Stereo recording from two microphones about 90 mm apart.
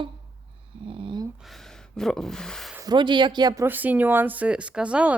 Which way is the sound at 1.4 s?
5° left (ahead or behind).